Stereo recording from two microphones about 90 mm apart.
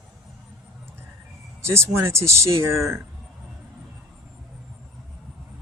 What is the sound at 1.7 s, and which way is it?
Speech, 30° right (ahead or behind).